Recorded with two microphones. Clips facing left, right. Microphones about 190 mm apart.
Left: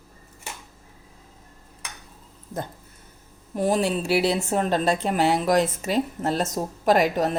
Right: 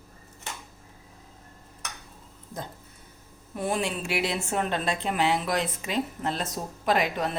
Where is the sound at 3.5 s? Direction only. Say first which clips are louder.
Left 6 dB; 40° left (ahead or behind).